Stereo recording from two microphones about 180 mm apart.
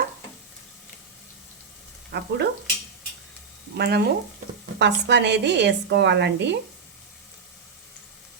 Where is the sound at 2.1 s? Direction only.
70° right (ahead or behind).